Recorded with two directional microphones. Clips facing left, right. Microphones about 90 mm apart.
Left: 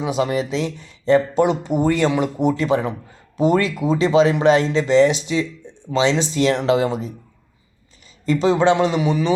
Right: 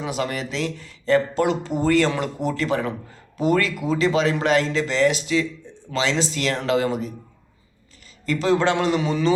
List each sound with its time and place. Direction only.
0.0 s speech: 20° left (ahead or behind)
8.3 s speech: 20° left (ahead or behind)